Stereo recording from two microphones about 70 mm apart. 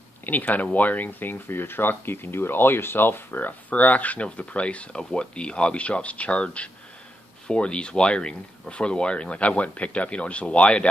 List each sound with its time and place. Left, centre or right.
0.2 s speech: left